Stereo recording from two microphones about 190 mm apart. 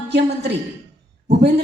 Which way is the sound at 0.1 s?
60° right (ahead or behind).